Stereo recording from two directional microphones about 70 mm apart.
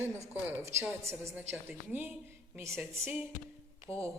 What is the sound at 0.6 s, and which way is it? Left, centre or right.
Speech, right.